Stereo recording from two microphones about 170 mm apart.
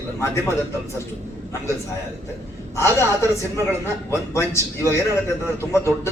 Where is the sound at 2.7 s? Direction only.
15° left (ahead or behind).